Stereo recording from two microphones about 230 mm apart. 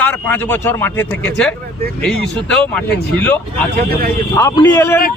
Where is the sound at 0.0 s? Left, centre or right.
Centre.